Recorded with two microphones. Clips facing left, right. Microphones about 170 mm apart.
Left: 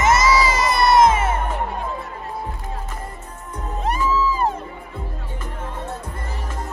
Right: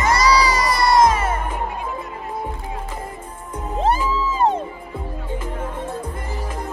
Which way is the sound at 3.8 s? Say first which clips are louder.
Even; 25° right (ahead or behind).